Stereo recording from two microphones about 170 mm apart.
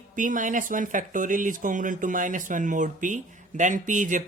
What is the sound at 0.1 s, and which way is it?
Speech, 50° right (ahead or behind).